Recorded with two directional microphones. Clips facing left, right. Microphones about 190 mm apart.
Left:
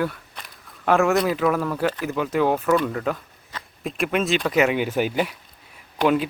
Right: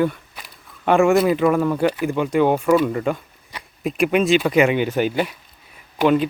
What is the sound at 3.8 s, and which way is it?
Speech, centre (ahead or behind).